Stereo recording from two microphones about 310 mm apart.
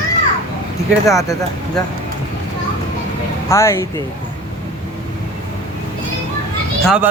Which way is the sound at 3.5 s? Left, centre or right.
Centre.